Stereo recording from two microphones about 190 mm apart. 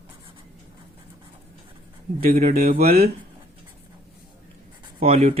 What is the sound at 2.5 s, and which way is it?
Speech, 50° right (ahead or behind).